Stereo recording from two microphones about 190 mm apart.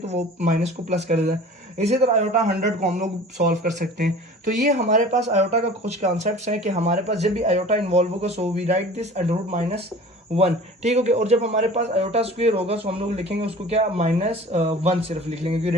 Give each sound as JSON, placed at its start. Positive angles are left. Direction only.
{"t": 0.0, "sound": "a man's voice", "side_deg": -35}